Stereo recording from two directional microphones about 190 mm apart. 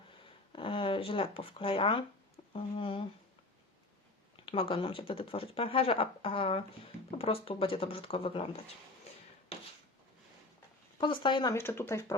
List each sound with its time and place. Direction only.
0.5 s speech: 25° left (ahead or behind)
4.7 s speech: 30° left (ahead or behind)
10.9 s speech: 25° left (ahead or behind)